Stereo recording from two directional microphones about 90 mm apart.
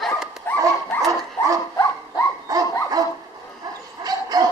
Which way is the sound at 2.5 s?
45° right (ahead or behind).